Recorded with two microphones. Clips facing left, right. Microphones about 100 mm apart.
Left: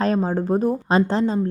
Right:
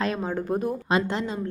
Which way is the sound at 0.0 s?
35° left (ahead or behind).